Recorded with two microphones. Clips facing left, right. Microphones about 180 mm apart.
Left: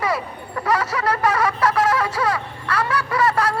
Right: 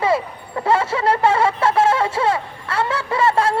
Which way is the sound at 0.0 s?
25° right (ahead or behind).